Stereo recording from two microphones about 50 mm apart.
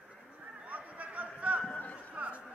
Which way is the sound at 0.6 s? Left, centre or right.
Right.